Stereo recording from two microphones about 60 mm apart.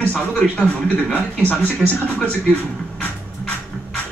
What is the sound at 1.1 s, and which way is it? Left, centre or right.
Speech, left.